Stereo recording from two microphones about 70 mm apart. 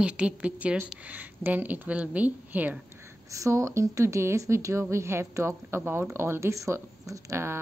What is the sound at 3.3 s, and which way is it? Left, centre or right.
A woman's voice, right.